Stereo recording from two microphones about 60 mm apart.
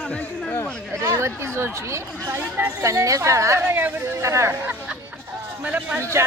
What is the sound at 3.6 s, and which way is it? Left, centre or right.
Speech, right.